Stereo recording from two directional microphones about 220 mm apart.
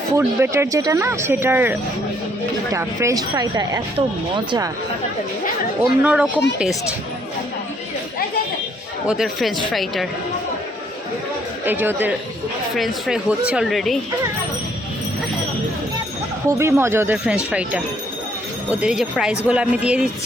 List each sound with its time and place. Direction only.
0.2 s speech: 10° right (ahead or behind)
5.8 s speech: 5° right (ahead or behind)
9.0 s speech: centre (ahead or behind)
11.6 s speech: 10° right (ahead or behind)
16.5 s speech: 10° right (ahead or behind)